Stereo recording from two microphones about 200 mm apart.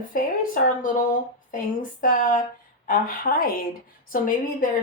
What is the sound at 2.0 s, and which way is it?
A man's voice, 40° left (ahead or behind).